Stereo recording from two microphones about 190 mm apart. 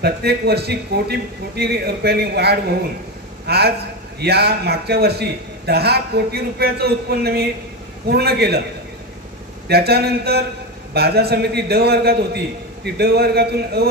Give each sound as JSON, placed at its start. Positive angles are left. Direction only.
{"t": 0.0, "sound": "a man's voice", "side_deg": -55}
{"t": 9.7, "sound": "a man's voice", "side_deg": -55}